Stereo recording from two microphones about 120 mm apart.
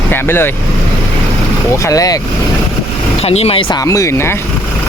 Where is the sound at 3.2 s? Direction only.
60° left (ahead or behind).